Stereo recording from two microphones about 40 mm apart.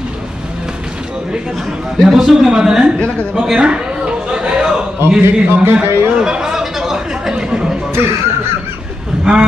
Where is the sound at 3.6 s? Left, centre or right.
Right.